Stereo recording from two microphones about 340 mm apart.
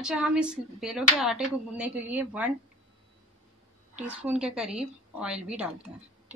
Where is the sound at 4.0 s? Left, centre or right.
Centre.